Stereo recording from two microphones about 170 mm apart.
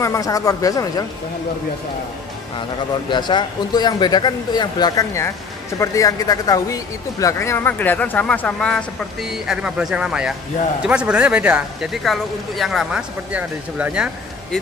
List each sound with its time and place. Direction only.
0.0 s speech: 20° left (ahead or behind)
3.1 s speech: 25° left (ahead or behind); by 14.6 s 5° right (ahead or behind)